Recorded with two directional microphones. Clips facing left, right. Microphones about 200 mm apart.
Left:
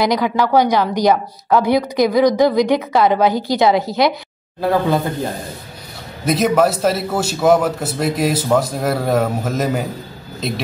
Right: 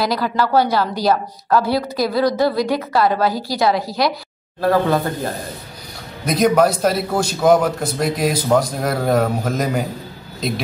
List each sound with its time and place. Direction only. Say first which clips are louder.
0.0 s a woman's voice: left 3 dB; 15° left (ahead or behind)
6.2 s a man's voice: even; 5° left (ahead or behind)